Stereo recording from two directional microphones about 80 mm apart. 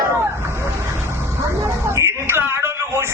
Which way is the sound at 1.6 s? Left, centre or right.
Right.